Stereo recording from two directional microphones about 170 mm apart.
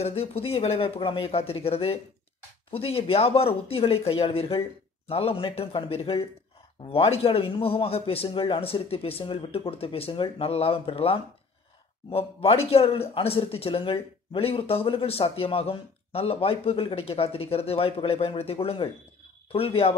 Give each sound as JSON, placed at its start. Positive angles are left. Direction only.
{"t": 0.0, "sound": "a man's voice", "side_deg": 40}